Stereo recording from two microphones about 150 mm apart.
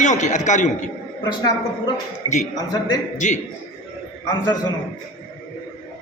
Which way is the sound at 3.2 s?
55° left (ahead or behind).